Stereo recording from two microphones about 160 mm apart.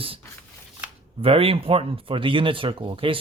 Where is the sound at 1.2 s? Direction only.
35° right (ahead or behind).